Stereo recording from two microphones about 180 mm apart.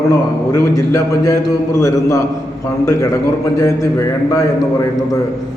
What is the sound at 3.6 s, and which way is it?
Speech, 15° left (ahead or behind).